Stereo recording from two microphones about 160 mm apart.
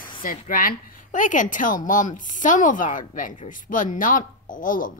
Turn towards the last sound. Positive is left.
turn(degrees=55)  # may be behind; listen again after turning